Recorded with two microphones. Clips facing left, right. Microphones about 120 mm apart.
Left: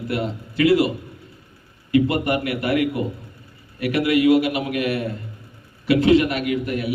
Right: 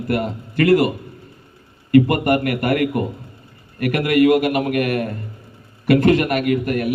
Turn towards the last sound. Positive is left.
turn(degrees=-55)  # may be behind; listen again after turning